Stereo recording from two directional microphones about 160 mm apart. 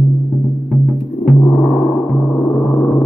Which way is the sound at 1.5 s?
15° left (ahead or behind).